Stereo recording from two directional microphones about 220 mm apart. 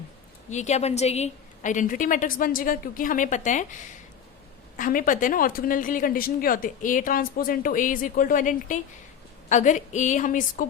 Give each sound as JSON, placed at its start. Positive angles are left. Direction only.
{"t": 0.5, "sound": "a woman's voice", "side_deg": 30}
{"t": 4.8, "sound": "a woman's voice", "side_deg": 40}